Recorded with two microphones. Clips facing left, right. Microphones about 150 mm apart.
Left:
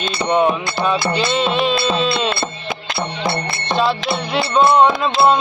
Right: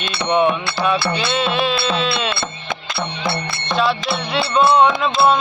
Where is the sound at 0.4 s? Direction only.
25° left (ahead or behind).